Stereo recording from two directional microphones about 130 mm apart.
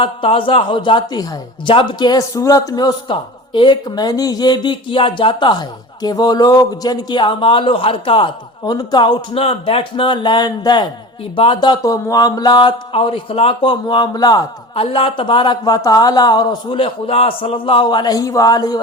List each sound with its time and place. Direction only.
0.0 s a man's voice: 45° left (ahead or behind)
8.6 s a man's voice: 30° left (ahead or behind)
14.8 s a man's voice: 45° left (ahead or behind)